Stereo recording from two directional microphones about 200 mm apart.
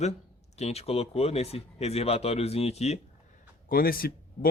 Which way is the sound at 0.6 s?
30° left (ahead or behind).